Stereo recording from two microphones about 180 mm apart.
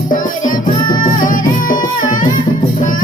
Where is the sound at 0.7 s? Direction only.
25° left (ahead or behind).